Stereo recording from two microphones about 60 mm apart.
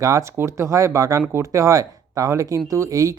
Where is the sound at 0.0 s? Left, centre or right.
Right.